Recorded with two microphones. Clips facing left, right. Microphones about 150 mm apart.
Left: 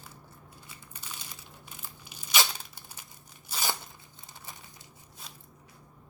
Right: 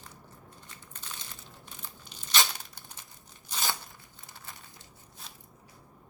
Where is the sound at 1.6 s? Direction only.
10° left (ahead or behind).